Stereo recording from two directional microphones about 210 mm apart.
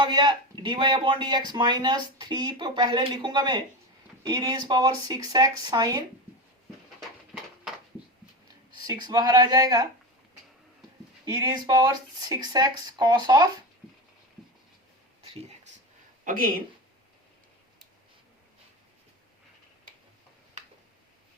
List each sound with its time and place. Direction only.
0.0 s speech: 20° right (ahead or behind)
8.7 s speech: 20° right (ahead or behind)
11.3 s speech: 20° right (ahead or behind)
15.2 s a sound: 30° right (ahead or behind)
16.2 s speech: 40° right (ahead or behind)